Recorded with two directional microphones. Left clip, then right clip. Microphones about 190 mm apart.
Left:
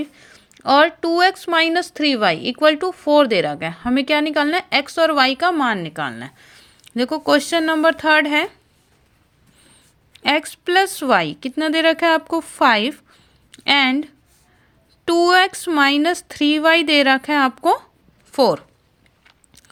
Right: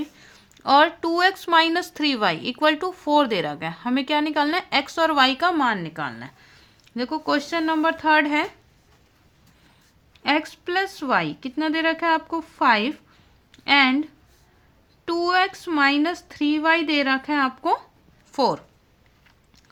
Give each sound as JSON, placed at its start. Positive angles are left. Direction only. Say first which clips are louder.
{"t": 0.0, "sound": "speech", "louder": "left 4 dB", "side_deg": 20}
{"t": 10.1, "sound": "a woman's voice", "louder": "left 4 dB", "side_deg": 35}